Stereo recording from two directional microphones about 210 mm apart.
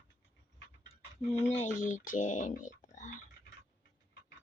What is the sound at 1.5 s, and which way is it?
Speech, 35° left (ahead or behind).